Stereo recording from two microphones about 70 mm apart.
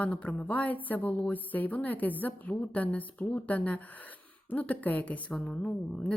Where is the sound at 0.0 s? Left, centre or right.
Centre.